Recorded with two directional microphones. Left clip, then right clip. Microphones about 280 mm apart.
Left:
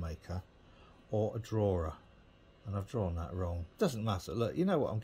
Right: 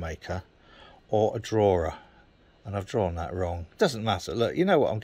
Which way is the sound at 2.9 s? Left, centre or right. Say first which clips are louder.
Right 11 dB; centre.